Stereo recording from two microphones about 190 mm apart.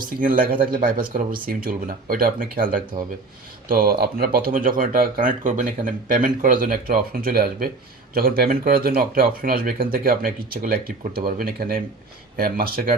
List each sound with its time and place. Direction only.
0.0 s speech: 50° right (ahead or behind)